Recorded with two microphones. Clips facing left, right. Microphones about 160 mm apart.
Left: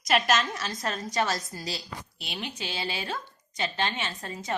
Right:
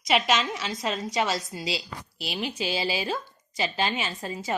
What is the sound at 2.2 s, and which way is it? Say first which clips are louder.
A woman's voice: right 7 dB; 5° right (ahead or behind).